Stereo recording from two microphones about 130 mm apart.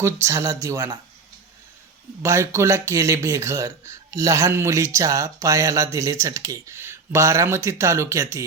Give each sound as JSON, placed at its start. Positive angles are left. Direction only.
{"t": 0.0, "sound": "speech", "side_deg": -20}
{"t": 2.2, "sound": "speech", "side_deg": -20}